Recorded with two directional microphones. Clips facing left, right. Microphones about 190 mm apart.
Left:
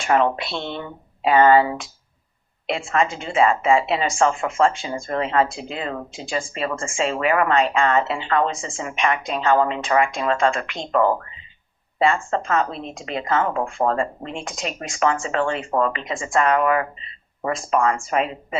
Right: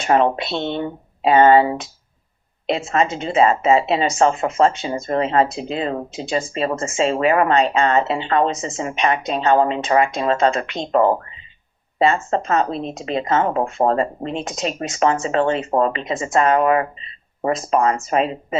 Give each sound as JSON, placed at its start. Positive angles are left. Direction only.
{"t": 0.0, "sound": "speech", "side_deg": -25}
{"t": 14.0, "sound": "speech", "side_deg": -30}